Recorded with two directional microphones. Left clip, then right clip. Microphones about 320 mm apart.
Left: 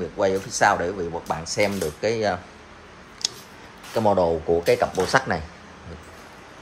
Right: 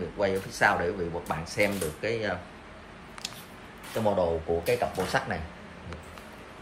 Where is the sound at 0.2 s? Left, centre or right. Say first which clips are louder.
Left 5 dB; centre.